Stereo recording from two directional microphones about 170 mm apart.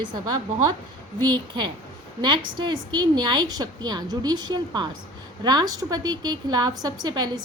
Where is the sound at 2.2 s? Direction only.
25° right (ahead or behind).